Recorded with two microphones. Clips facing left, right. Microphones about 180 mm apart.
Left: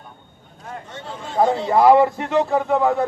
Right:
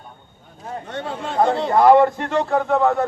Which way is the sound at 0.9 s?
65° right (ahead or behind).